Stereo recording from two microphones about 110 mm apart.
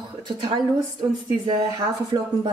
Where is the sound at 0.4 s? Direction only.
45° right (ahead or behind).